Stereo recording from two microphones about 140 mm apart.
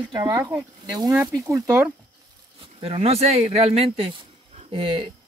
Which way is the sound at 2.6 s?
45° right (ahead or behind).